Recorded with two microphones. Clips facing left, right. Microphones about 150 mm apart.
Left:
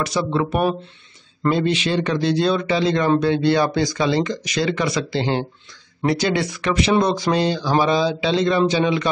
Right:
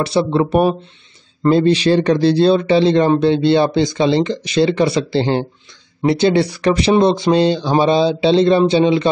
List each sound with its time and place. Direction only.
0.0 s speech: 30° right (ahead or behind)